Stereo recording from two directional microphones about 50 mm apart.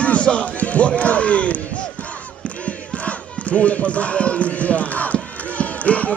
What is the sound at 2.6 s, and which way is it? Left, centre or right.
Battle cry, left.